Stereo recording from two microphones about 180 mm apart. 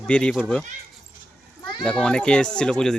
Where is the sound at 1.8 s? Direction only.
5° left (ahead or behind).